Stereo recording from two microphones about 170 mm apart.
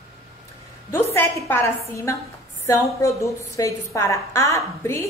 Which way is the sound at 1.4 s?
15° left (ahead or behind).